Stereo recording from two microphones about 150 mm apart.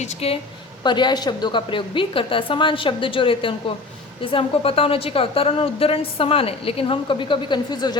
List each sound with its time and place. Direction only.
0.0 s a woman's voice: 40° left (ahead or behind)
0.9 s a woman's voice: 30° left (ahead or behind)